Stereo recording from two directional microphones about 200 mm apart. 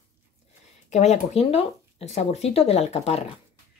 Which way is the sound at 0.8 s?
35° left (ahead or behind).